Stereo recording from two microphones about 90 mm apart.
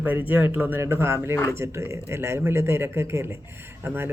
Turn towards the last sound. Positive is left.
turn(degrees=-20)  # may be behind; listen again after turning